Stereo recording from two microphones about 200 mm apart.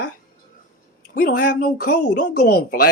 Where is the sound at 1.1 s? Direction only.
45° left (ahead or behind).